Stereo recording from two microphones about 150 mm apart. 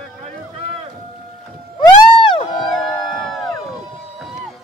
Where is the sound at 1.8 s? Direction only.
30° left (ahead or behind).